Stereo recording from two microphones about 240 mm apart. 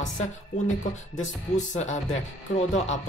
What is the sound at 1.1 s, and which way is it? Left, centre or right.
Speech, left.